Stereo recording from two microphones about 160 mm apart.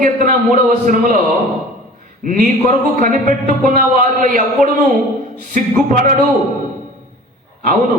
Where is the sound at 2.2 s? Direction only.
55° right (ahead or behind).